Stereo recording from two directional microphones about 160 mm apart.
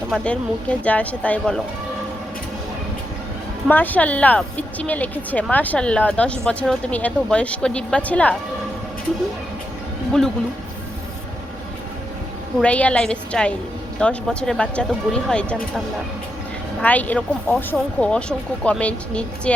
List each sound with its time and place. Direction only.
0.1 s speech: 5° left (ahead or behind)
3.7 s speech: 10° left (ahead or behind)
10.1 s speech: 5° left (ahead or behind)
12.5 s speech: 10° left (ahead or behind)
16.8 s speech: 10° left (ahead or behind)